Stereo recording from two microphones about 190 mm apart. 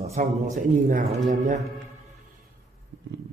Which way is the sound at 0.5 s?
45° right (ahead or behind).